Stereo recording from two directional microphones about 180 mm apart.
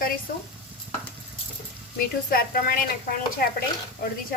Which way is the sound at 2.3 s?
55° left (ahead or behind).